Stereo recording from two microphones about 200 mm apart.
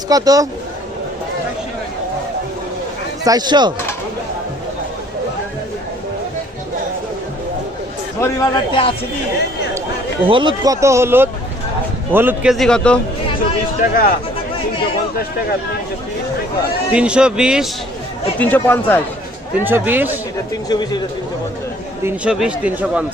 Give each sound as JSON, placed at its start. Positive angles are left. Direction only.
{"t": 0.1, "sound": "speech", "side_deg": -20}
{"t": 3.2, "sound": "speech", "side_deg": -20}
{"t": 8.2, "sound": "a man's voice", "side_deg": 20}
{"t": 10.2, "sound": "speech", "side_deg": -25}
{"t": 13.8, "sound": "speech", "side_deg": 45}
{"t": 16.9, "sound": "speech", "side_deg": -5}
{"t": 18.3, "sound": "speech", "side_deg": 10}
{"t": 19.6, "sound": "speech", "side_deg": -10}
{"t": 20.5, "sound": "speech", "side_deg": 20}
{"t": 22.0, "sound": "speech", "side_deg": -5}